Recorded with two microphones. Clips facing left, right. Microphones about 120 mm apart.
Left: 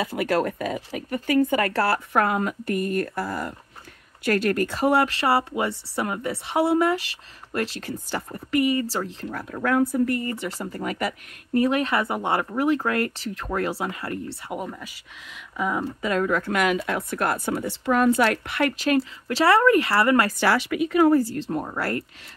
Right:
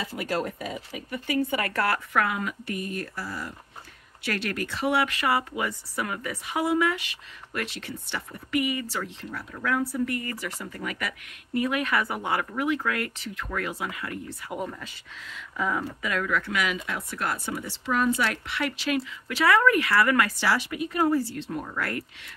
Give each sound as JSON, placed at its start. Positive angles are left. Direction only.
{"t": 0.0, "sound": "speech", "side_deg": 65}
{"t": 9.3, "sound": "speech", "side_deg": 50}
{"t": 10.0, "sound": "speech", "side_deg": 30}
{"t": 14.6, "sound": "speech", "side_deg": 10}
{"t": 16.0, "sound": "speech", "side_deg": 35}
{"t": 16.7, "sound": "speech", "side_deg": 55}
{"t": 20.3, "sound": "speech", "side_deg": 65}
{"t": 21.2, "sound": "speech", "side_deg": 40}